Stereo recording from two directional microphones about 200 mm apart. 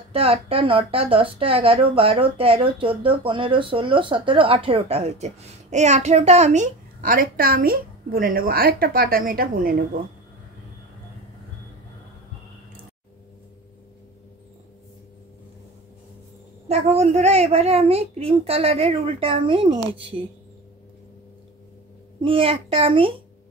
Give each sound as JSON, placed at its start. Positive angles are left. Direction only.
{"t": 0.1, "sound": "a woman's voice", "side_deg": -30}
{"t": 16.6, "sound": "a woman's voice", "side_deg": -30}
{"t": 22.2, "sound": "a woman's voice", "side_deg": -25}